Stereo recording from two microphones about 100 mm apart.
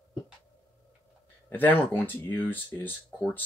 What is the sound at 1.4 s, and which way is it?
Speech, 20° left (ahead or behind).